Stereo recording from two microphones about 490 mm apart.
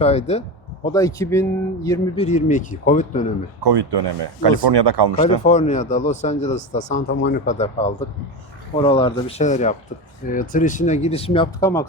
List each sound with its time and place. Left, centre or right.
0.0 s speech: centre
3.6 s speech: right
5.2 s speech: centre